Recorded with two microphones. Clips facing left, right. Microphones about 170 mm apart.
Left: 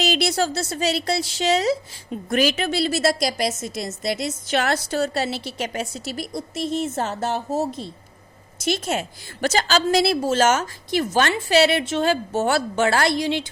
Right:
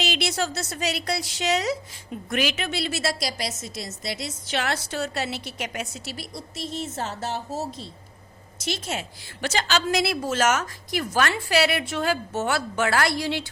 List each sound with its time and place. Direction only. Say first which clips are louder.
0.0 s a woman's voice: left 5 dB; 40° left (ahead or behind)
6.1 s a woman's voice: left 10 dB; 55° left (ahead or behind); by 13.5 s 20° left (ahead or behind)